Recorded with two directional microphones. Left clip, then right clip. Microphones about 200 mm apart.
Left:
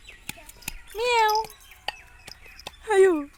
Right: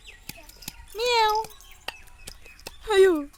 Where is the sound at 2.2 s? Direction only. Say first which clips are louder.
Left 2 dB; 45° right (ahead or behind).